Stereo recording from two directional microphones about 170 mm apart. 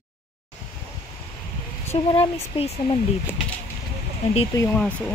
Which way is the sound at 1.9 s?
35° left (ahead or behind).